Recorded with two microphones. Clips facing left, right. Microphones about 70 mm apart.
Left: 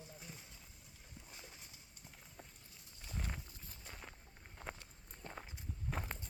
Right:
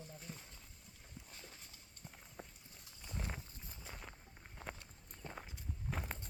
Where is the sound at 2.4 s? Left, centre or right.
Centre.